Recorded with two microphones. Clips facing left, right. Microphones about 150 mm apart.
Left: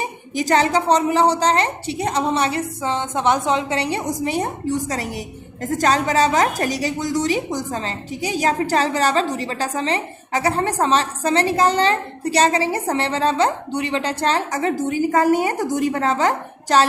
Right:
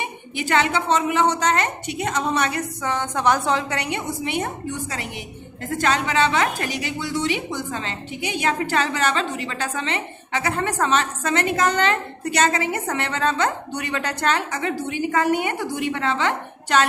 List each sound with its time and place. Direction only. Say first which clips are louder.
0.0 s a woman's voice: left 4 dB; 40° left (ahead or behind)